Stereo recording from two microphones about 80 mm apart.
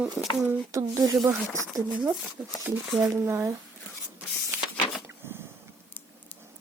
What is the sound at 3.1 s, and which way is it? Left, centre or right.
Speech, right.